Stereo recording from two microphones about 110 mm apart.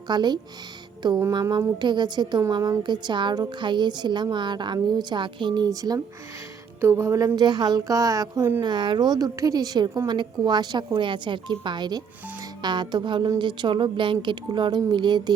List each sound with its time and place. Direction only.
0.1 s a woman's voice: 40° right (ahead or behind)
6.8 s music: 25° right (ahead or behind)
7.3 s a woman's voice: 40° right (ahead or behind)